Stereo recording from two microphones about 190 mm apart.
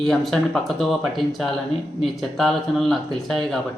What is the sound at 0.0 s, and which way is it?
Speech, centre (ahead or behind).